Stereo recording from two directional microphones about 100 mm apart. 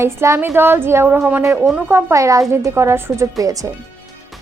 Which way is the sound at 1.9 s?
25° right (ahead or behind).